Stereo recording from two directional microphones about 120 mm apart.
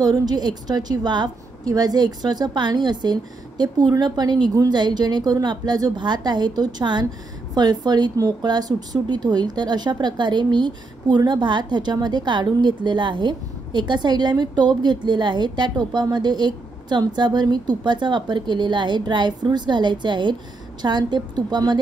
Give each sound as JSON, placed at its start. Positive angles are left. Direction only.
{"t": 0.0, "sound": "a woman's voice", "side_deg": -35}